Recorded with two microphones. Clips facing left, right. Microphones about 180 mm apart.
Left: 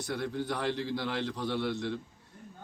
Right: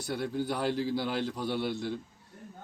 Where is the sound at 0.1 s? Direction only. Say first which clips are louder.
Right 2 dB; 10° right (ahead or behind).